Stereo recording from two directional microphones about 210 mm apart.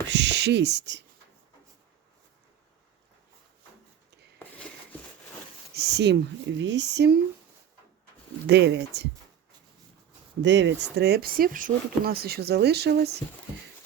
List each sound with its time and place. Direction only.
0.1 s speech: 55° right (ahead or behind)
5.7 s speech: 50° right (ahead or behind)
8.4 s speech: 55° right (ahead or behind)
10.4 s speech: 60° right (ahead or behind)